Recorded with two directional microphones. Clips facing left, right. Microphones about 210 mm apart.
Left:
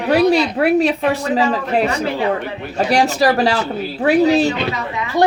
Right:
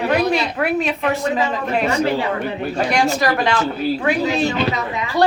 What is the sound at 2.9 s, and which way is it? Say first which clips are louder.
Speech: left 5 dB; 35° left (ahead or behind).